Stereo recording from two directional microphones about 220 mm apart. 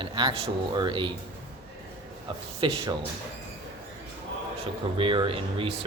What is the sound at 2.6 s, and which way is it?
Speech, 20° right (ahead or behind).